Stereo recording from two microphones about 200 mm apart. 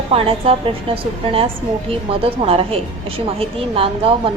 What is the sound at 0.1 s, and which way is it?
Speech, 30° right (ahead or behind).